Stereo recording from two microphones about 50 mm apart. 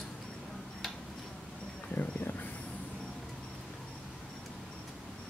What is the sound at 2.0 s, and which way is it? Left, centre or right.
Speech, left.